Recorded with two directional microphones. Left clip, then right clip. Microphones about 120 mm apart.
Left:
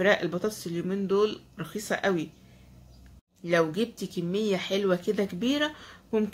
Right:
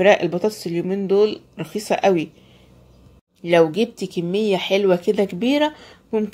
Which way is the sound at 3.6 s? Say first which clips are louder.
Right 10 dB; 30° right (ahead or behind).